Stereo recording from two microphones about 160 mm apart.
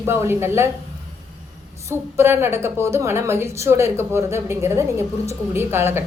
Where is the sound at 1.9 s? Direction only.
15° right (ahead or behind).